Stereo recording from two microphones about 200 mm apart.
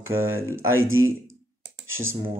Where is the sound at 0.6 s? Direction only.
90° right.